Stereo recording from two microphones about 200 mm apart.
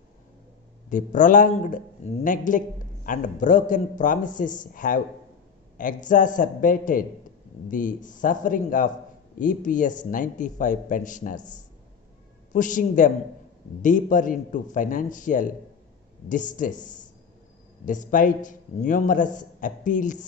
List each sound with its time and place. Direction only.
0.8 s a man's voice: 40° left (ahead or behind)